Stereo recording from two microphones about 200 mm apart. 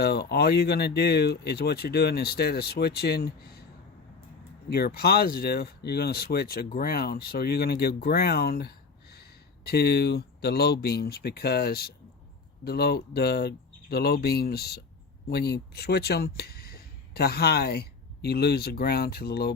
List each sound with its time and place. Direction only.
0.0 s speech: 55° left (ahead or behind)
4.7 s speech: 50° left (ahead or behind)